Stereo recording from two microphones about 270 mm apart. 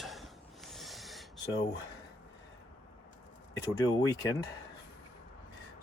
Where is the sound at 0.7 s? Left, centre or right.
Centre.